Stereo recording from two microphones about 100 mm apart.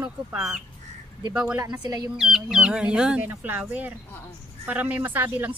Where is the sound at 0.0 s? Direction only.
10° right (ahead or behind).